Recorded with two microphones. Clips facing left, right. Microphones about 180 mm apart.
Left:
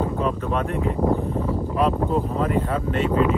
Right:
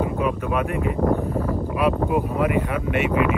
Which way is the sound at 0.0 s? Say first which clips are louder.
Right 1 dB; 10° right (ahead or behind).